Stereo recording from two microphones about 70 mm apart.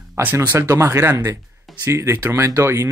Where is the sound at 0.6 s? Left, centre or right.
Right.